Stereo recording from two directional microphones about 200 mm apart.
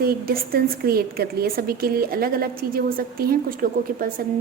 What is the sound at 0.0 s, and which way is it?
A woman's voice, 45° right (ahead or behind).